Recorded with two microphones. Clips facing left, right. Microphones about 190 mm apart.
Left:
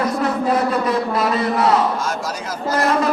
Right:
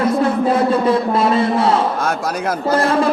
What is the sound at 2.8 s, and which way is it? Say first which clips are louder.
Speech: even; 30° right (ahead or behind).